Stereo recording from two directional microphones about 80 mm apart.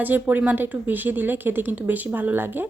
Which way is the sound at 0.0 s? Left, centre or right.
Right.